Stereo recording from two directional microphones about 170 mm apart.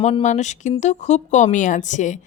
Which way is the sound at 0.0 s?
40° left (ahead or behind).